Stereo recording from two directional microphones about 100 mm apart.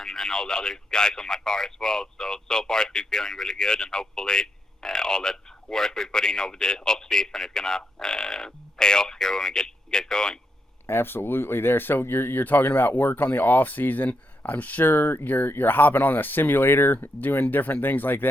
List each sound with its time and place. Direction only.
0.0 s speech: 5° left (ahead or behind)
10.8 s speech: 20° left (ahead or behind)